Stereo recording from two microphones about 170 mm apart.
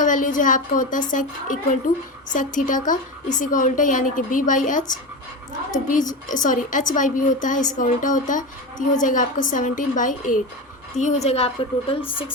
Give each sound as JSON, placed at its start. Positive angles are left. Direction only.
{"t": 0.0, "sound": "a woman's voice", "side_deg": 50}
{"t": 5.9, "sound": "a woman's voice", "side_deg": 50}